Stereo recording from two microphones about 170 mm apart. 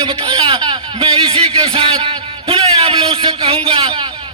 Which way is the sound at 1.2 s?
35° right (ahead or behind).